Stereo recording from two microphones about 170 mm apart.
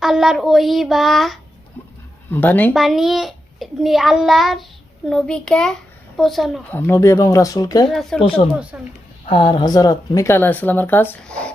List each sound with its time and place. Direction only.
0.0 s a child's voice: centre (ahead or behind)
2.3 s speech: 10° left (ahead or behind)
2.7 s a child's voice: centre (ahead or behind)
6.7 s speech: 15° left (ahead or behind)
7.9 s a child's voice: centre (ahead or behind)
8.7 s a woman's voice: 10° right (ahead or behind)
9.3 s speech: 25° left (ahead or behind); by 11.5 s 5° left (ahead or behind)